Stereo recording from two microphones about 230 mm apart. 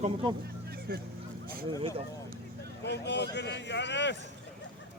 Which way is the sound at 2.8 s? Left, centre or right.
Left.